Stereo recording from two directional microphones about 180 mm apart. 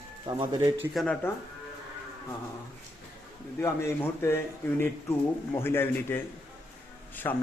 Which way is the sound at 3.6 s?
15° left (ahead or behind).